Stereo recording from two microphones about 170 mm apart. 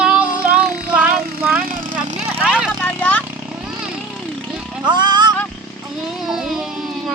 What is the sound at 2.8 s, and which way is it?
Vehicle, 10° left (ahead or behind).